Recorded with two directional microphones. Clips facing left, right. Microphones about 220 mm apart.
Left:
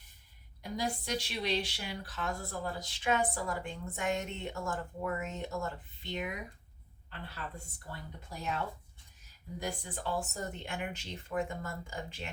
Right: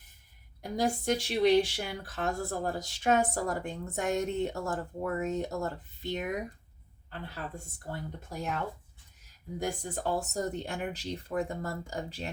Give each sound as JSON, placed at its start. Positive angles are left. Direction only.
{"t": 0.6, "sound": "speech", "side_deg": -50}
{"t": 9.6, "sound": "speech", "side_deg": -45}